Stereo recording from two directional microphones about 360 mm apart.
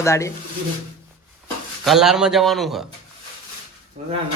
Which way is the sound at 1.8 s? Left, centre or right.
Centre.